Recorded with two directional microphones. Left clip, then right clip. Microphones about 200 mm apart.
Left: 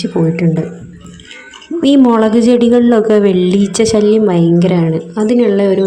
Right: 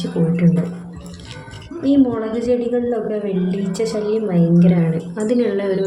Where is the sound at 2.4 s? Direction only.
40° left (ahead or behind).